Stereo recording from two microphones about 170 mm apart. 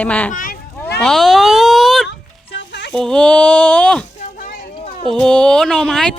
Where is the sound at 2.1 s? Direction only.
90° left.